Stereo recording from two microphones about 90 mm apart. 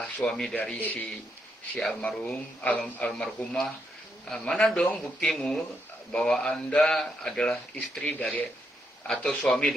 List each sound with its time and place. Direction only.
0.0 s a man's voice: 10° left (ahead or behind)